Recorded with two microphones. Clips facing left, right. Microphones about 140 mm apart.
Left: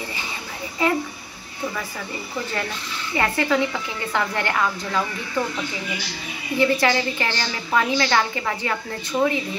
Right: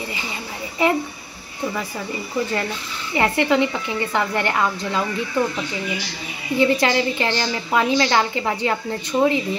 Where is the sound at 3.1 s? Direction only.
20° right (ahead or behind).